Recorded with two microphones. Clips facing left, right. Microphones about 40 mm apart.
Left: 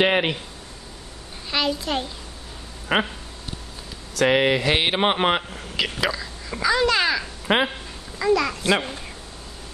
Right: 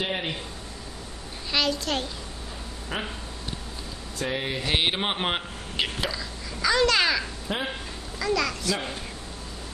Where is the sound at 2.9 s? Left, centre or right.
Left.